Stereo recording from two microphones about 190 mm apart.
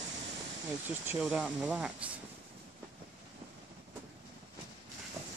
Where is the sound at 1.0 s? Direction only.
5° right (ahead or behind).